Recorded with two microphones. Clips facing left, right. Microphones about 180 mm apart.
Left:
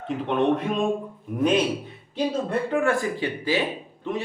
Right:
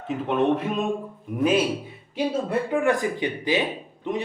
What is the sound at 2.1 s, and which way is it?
Speech, 10° right (ahead or behind).